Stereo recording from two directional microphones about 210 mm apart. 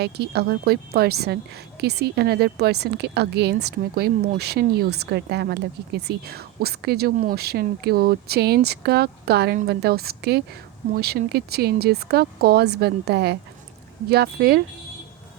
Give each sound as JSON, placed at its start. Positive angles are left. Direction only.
{"t": 0.0, "sound": "a woman's voice", "side_deg": -50}